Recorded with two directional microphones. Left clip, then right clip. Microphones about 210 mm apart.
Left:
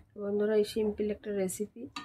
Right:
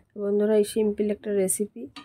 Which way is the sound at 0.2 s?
45° right (ahead or behind).